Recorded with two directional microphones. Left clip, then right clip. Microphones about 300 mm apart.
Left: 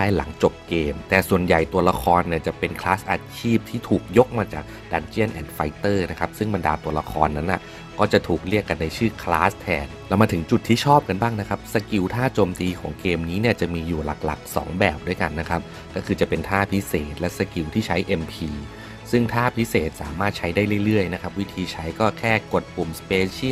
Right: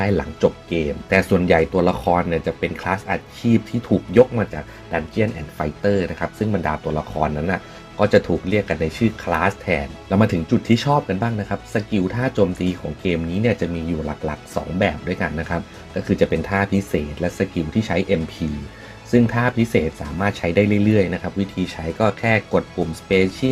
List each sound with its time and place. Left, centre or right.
0.0 s speech: left
14.8 s speech: left